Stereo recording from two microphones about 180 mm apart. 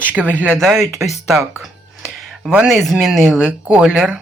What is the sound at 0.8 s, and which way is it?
Speech, 15° right (ahead or behind).